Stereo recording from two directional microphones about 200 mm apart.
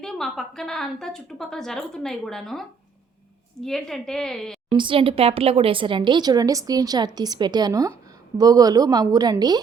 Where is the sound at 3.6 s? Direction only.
Centre (ahead or behind).